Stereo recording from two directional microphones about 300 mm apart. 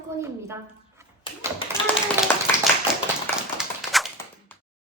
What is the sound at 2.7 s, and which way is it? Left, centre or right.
Clapping, centre.